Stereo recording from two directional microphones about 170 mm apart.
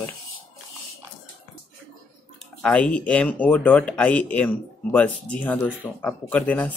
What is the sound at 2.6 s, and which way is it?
Speech, 5° left (ahead or behind).